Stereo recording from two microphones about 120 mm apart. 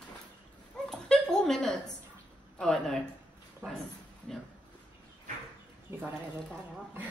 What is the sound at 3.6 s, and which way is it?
Speech, 20° right (ahead or behind).